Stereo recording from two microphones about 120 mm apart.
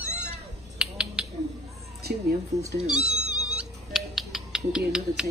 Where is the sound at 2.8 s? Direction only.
5° right (ahead or behind).